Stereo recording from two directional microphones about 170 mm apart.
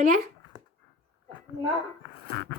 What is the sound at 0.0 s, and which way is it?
Dog, 50° right (ahead or behind).